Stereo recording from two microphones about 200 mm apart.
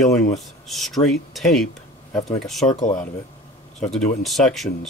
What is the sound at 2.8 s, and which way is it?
Speech, 40° left (ahead or behind).